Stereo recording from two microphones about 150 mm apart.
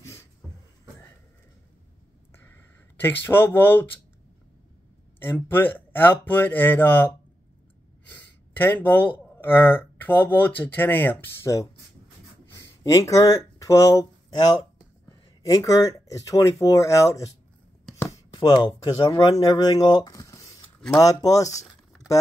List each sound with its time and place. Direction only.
0.0 s a sound: 20° left (ahead or behind)
2.3 s a sound: 15° left (ahead or behind)
5.2 s speech: 15° left (ahead or behind)
8.5 s speech: 15° left (ahead or behind)
17.9 s chopping: 20° left (ahead or behind)
18.3 s speech: 35° left (ahead or behind)